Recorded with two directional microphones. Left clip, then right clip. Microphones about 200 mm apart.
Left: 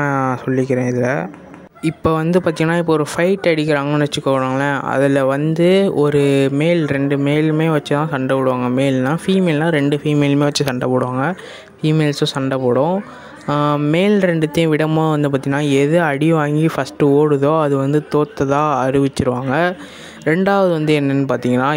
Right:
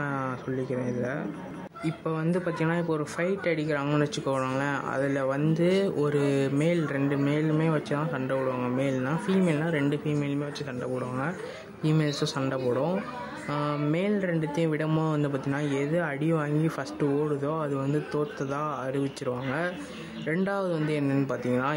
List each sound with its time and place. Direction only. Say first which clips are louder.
0.0 s speech: left 13 dB; 45° left (ahead or behind)
13.5 s speech: left 13 dB; 45° left (ahead or behind)
14.9 s speech: left 12 dB; 35° left (ahead or behind)
21.4 s speech: left 11 dB; 45° left (ahead or behind)